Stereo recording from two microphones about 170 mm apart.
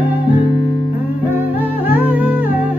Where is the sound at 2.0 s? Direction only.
10° right (ahead or behind).